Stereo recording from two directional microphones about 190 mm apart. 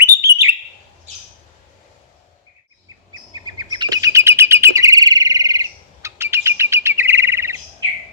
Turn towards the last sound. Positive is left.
turn(degrees=-15)  # may be behind; listen again after turning